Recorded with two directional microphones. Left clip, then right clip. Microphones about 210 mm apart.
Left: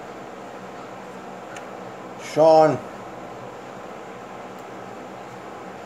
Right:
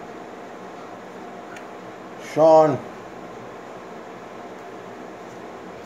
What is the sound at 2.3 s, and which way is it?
Speech, centre (ahead or behind).